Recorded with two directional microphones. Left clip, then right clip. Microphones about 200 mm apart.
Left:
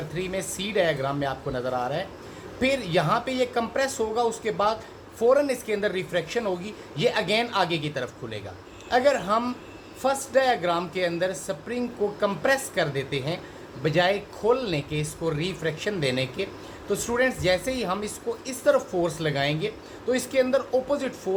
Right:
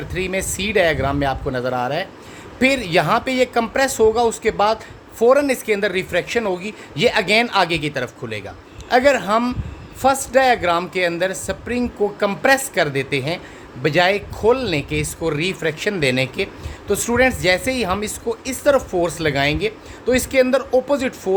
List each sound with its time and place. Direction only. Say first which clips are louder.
0.1 s a woman's voice: right 10 dB; 55° right (ahead or behind)